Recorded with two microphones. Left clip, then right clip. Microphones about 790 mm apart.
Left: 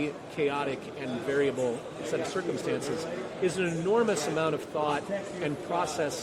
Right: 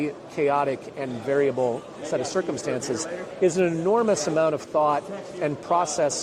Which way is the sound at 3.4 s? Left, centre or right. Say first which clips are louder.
Right 8 dB; right.